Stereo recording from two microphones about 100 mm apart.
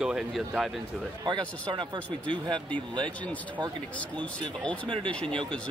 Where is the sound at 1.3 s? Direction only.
50° right (ahead or behind).